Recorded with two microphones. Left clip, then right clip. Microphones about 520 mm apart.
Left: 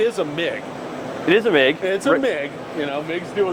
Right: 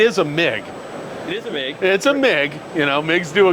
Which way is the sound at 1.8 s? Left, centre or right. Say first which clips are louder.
Right 3 dB; right.